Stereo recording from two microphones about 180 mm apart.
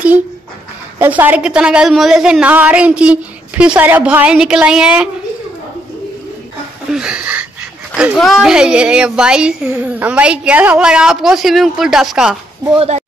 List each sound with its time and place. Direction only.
0.9 s a woman's voice: 10° right (ahead or behind)
6.9 s a sound: 5° right (ahead or behind)
7.9 s a woman's voice: 5° right (ahead or behind)
12.7 s speech: 35° right (ahead or behind)